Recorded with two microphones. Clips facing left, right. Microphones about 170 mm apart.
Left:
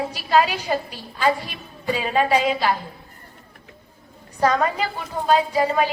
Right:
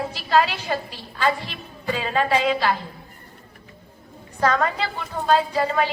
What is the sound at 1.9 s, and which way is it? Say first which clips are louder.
Speech: left 2 dB; 15° left (ahead or behind).